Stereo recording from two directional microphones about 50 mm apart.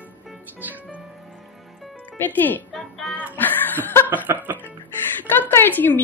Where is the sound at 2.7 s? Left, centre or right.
Centre.